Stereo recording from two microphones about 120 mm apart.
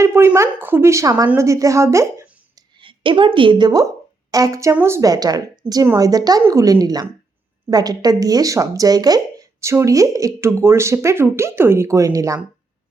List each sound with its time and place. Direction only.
0.0 s speech: 20° right (ahead or behind)
2.6 s speech: 45° right (ahead or behind); by 12.4 s 25° right (ahead or behind)